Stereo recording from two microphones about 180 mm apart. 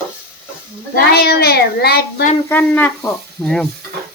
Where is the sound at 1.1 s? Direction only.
60° left (ahead or behind).